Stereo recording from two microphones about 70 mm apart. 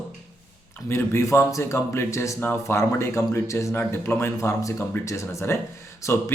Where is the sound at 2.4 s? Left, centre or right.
Left.